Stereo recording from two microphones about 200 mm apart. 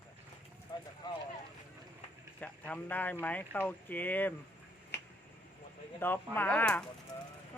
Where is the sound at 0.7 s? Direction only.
20° left (ahead or behind).